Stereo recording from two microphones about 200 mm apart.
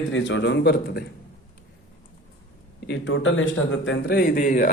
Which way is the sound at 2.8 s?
60° left (ahead or behind).